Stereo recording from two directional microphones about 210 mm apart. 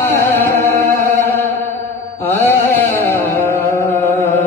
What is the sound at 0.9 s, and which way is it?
Music, 15° left (ahead or behind).